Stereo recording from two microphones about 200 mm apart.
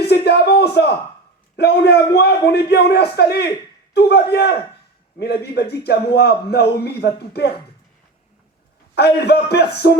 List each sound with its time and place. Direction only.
0.1 s a sound: 55° left (ahead or behind)
1.5 s a man's voice: 55° left (ahead or behind)
9.0 s a man's voice: 55° left (ahead or behind)